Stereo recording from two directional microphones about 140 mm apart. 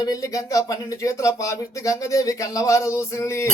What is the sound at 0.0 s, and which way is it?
Speech, 25° left (ahead or behind).